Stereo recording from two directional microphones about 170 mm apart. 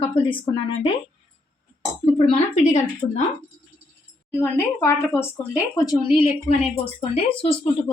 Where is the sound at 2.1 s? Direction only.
35° left (ahead or behind).